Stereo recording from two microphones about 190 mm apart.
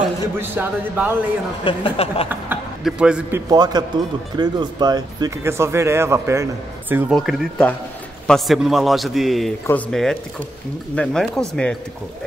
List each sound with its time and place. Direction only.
0.4 s speech: 10° right (ahead or behind)
1.6 s a woman's voice: 25° left (ahead or behind)
2.2 s a man's voice: 5° right (ahead or behind)
7.1 s a man's voice: centre (ahead or behind)